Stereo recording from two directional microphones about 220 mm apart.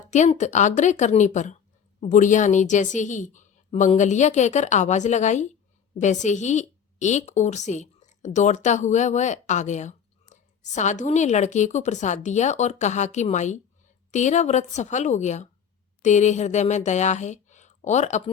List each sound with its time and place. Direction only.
0.1 s a woman's voice: 30° left (ahead or behind)